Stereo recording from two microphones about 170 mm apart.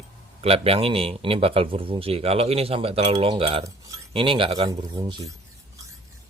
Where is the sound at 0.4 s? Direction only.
35° right (ahead or behind).